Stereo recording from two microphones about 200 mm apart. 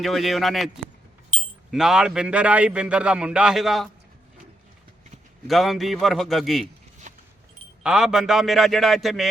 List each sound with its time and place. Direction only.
0.0 s a man's voice: centre (ahead or behind)
1.3 s wind chime: 35° right (ahead or behind)
1.7 s a man's voice: centre (ahead or behind)
5.5 s a man's voice: centre (ahead or behind)
7.1 s keys jangling: 40° right (ahead or behind)
7.9 s a man's voice: 5° right (ahead or behind)